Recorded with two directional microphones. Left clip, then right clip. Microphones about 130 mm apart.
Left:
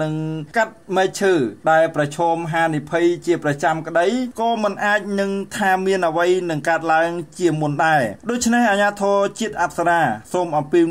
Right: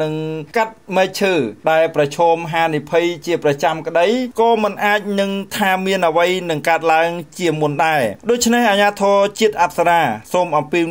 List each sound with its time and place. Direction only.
0.0 s speech: 10° right (ahead or behind)